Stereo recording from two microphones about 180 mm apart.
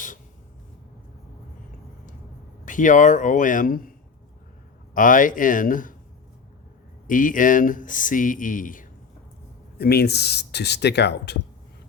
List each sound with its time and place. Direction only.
2.6 s speech: 45° left (ahead or behind)
4.9 s speech: 45° left (ahead or behind)
7.1 s speech: 50° left (ahead or behind)
9.7 s speech: 60° left (ahead or behind)